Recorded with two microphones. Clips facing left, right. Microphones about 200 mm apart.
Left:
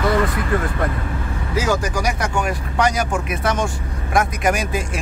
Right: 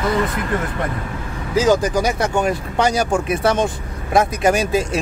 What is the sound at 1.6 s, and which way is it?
Speech, 20° right (ahead or behind).